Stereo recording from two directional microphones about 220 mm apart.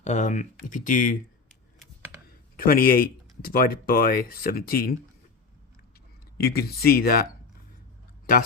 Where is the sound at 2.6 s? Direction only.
40° left (ahead or behind).